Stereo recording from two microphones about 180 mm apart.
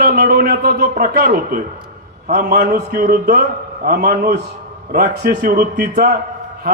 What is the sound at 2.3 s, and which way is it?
A man's voice, 50° right (ahead or behind).